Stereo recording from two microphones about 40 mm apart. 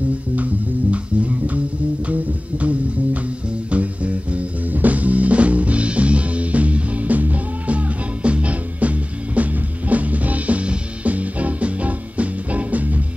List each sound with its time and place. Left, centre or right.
0.9 s music: right